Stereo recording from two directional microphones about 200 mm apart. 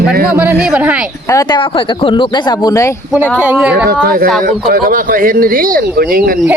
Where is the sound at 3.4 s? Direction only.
5° right (ahead or behind).